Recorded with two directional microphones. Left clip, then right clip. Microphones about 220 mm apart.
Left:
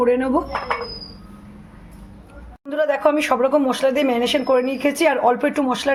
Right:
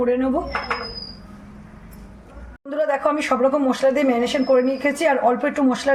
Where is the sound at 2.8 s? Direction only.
35° left (ahead or behind).